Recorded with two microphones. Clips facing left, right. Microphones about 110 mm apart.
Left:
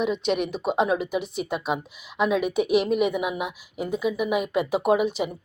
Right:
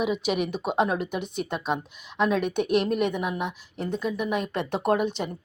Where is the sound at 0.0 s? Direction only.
5° right (ahead or behind).